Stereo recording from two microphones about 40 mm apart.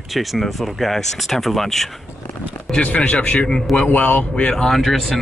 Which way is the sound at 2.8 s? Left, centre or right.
Left.